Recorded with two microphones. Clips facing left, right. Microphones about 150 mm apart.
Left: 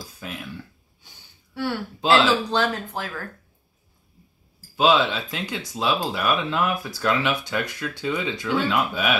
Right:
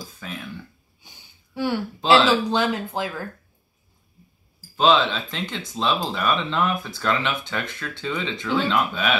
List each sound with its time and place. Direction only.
0.2 s cough: 10° left (ahead or behind)
1.0 s a sound: 15° right (ahead or behind)
2.0 s speech: 15° right (ahead or behind)
4.7 s speech: 10° left (ahead or behind)